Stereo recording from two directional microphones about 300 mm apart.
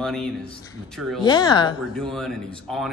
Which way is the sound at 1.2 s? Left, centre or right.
Centre.